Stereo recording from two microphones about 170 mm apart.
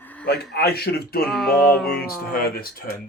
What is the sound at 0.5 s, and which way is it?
Speech, 65° left (ahead or behind).